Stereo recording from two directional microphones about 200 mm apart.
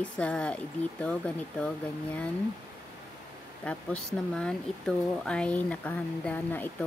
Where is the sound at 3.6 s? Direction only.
5° left (ahead or behind).